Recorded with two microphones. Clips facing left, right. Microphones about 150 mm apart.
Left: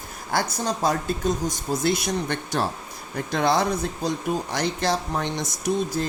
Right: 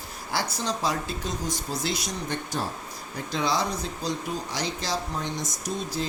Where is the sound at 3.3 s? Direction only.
55° left (ahead or behind).